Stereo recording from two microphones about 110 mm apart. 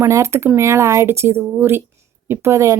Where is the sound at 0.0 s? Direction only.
25° right (ahead or behind).